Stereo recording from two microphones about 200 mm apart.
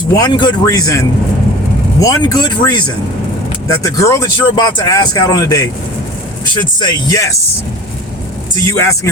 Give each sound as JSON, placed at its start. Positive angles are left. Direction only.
{"t": 0.2, "sound": "speech", "side_deg": 20}
{"t": 8.5, "sound": "speech", "side_deg": 15}